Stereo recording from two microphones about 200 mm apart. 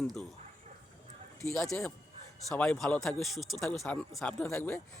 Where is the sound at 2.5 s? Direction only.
5° left (ahead or behind).